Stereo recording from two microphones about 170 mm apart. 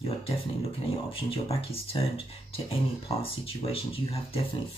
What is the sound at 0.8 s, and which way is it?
Speech, 35° left (ahead or behind).